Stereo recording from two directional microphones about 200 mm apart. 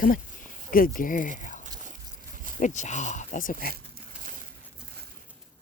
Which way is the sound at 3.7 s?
45° right (ahead or behind).